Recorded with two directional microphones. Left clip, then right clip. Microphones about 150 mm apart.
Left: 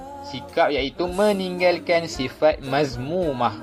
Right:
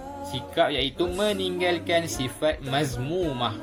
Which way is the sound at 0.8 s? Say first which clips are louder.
Left 4 dB; 45° left (ahead or behind).